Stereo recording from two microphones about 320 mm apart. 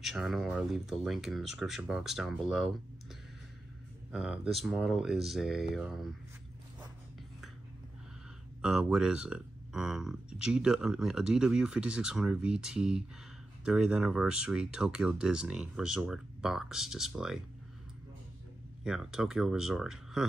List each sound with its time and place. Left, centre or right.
0.0 s speech: centre
4.1 s speech: centre
8.6 s speech: centre
18.9 s speech: centre